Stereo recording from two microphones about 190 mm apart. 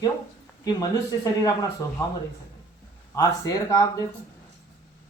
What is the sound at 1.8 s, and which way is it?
Speech, 15° left (ahead or behind).